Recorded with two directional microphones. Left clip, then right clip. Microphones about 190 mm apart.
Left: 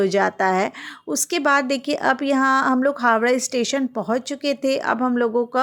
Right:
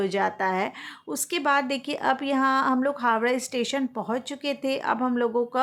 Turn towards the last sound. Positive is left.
turn(degrees=20)  # may be behind; listen again after turning